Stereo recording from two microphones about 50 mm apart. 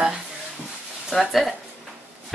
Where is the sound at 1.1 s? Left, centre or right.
Centre.